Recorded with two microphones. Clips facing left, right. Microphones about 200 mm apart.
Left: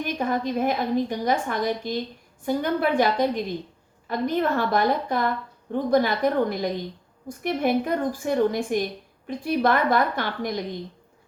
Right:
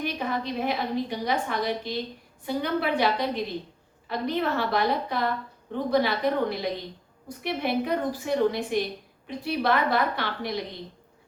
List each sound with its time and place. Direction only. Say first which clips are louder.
0.0 s a woman's voice: left 4 dB; 45° left (ahead or behind)